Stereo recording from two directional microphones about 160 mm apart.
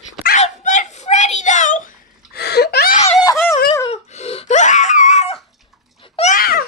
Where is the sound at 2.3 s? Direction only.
85° left.